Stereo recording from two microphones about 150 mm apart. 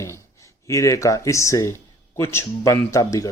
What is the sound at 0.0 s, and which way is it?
Speech, 20° left (ahead or behind).